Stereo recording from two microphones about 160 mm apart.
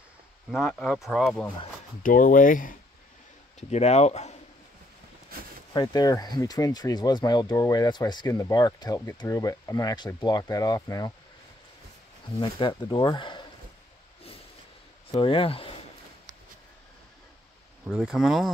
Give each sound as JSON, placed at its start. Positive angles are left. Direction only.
{"t": 0.5, "sound": "speech", "side_deg": 5}
{"t": 2.0, "sound": "speech", "side_deg": 60}
{"t": 3.7, "sound": "speech", "side_deg": 40}
{"t": 5.7, "sound": "speech", "side_deg": 25}
{"t": 12.4, "sound": "speech", "side_deg": 30}
{"t": 15.1, "sound": "speech", "side_deg": 35}
{"t": 17.8, "sound": "speech", "side_deg": 0}